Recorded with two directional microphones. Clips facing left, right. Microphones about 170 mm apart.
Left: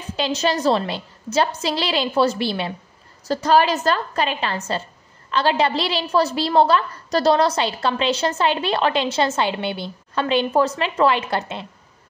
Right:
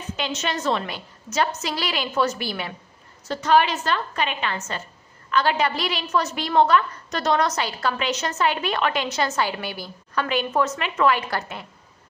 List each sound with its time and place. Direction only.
0.1 s a woman's voice: 35° left (ahead or behind)